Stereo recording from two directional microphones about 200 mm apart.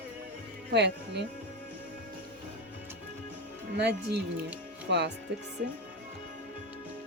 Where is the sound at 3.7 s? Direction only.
55° right (ahead or behind).